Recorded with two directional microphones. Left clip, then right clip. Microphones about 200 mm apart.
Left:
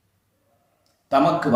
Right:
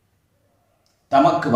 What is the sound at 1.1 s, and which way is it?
Speech, 5° left (ahead or behind).